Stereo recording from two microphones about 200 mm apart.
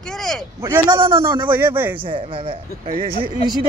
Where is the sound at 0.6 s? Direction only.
10° right (ahead or behind).